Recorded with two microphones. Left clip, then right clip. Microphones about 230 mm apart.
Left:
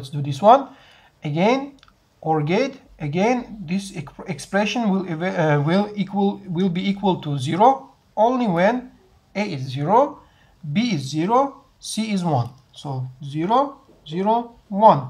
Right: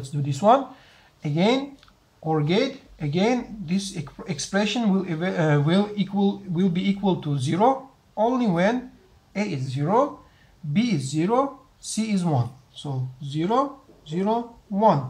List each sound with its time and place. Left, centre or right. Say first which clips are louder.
0.0 s speech: left 5 dB; centre
9.4 s speech: left 2 dB; centre
9.8 s speech: left 5 dB; centre
14.7 s speech: left 6 dB; left